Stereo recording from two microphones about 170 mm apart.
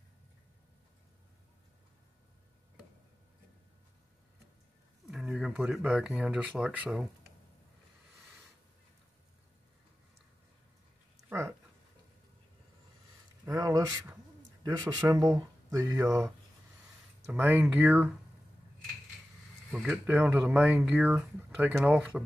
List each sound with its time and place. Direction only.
5.0 s a sound: centre (ahead or behind)
5.8 s speech: 5° right (ahead or behind)
11.2 s dog: 15° right (ahead or behind)
13.5 s a sound: 20° right (ahead or behind)
14.6 s speech: 20° right (ahead or behind)
17.3 s speech: 10° right (ahead or behind)
19.7 s speech: 5° right (ahead or behind)